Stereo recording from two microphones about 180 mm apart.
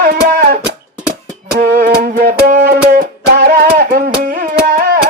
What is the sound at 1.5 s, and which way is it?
Music, 50° right (ahead or behind).